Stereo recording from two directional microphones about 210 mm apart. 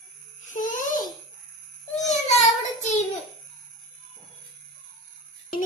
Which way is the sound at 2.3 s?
35° left (ahead or behind).